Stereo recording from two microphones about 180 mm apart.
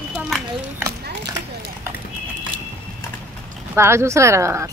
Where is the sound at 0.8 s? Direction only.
15° right (ahead or behind).